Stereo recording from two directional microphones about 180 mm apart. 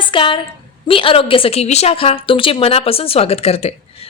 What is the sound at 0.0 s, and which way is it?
A woman's voice, 30° left (ahead or behind).